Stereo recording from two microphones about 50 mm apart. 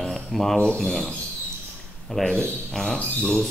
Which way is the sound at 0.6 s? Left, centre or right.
Centre.